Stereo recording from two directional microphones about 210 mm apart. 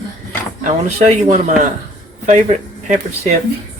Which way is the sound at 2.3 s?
35° right (ahead or behind).